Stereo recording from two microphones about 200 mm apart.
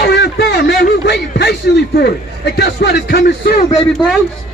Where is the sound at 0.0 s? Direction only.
55° left (ahead or behind).